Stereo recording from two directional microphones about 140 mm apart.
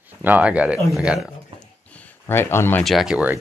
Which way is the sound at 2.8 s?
Centre (ahead or behind).